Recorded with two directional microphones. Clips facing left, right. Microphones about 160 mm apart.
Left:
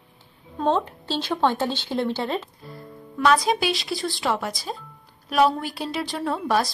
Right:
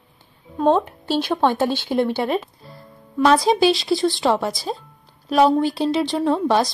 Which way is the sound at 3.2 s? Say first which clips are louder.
Right 5 dB; 30° right (ahead or behind).